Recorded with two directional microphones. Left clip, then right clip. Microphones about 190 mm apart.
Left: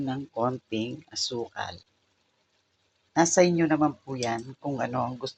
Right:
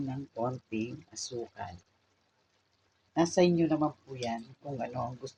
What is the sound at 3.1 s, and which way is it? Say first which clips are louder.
Speech: left 6 dB; 20° left (ahead or behind).